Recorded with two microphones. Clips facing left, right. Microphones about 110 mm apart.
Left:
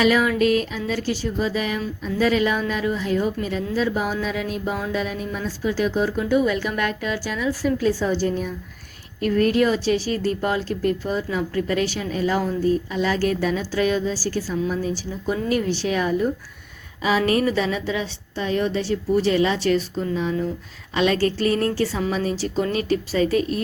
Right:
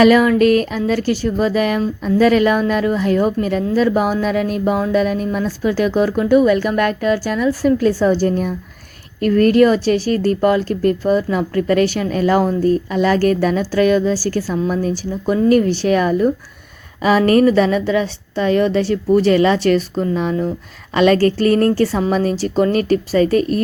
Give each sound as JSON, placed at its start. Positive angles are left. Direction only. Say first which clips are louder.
{"t": 0.0, "sound": "speech", "louder": "right 7 dB", "side_deg": -55}